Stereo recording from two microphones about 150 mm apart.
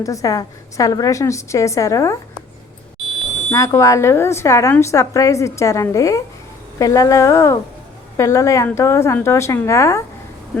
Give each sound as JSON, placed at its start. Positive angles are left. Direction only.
{"t": 0.0, "sound": "speech", "side_deg": 20}
{"t": 3.5, "sound": "speech", "side_deg": 20}